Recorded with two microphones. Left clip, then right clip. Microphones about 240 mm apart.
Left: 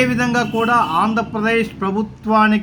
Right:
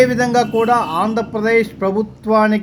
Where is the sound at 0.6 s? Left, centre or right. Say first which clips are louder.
Even; centre.